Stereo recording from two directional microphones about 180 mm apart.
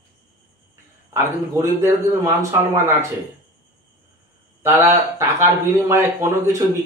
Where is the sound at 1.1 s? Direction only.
15° right (ahead or behind).